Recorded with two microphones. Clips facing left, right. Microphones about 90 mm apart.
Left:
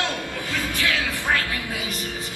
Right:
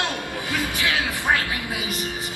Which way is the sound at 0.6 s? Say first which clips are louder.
Even; 20° right (ahead or behind).